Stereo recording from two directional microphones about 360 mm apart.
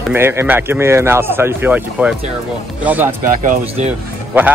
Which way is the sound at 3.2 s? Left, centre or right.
Right.